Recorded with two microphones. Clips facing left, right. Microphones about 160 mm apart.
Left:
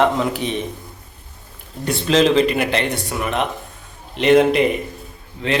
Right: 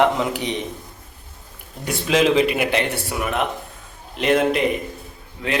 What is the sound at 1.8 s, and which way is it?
Speech, 10° right (ahead or behind).